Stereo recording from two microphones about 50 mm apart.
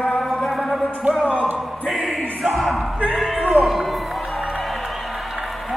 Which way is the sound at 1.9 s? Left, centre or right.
Centre.